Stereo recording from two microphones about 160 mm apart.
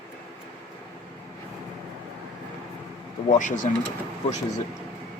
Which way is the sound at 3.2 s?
50° left (ahead or behind).